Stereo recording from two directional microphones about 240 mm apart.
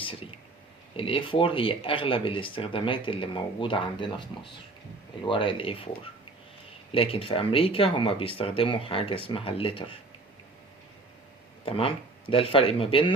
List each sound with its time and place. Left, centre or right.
0.0 s a sound: left
0.9 s speech: left
11.6 s speech: left